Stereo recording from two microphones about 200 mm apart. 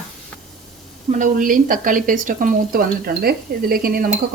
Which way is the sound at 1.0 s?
40° right (ahead or behind).